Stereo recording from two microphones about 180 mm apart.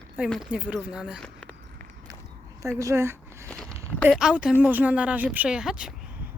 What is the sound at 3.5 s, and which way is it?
Walk, centre (ahead or behind).